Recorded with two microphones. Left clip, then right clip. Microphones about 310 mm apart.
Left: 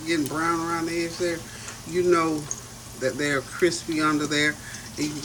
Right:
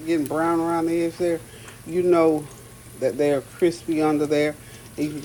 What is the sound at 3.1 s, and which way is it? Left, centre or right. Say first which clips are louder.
Speech: right 4 dB; right.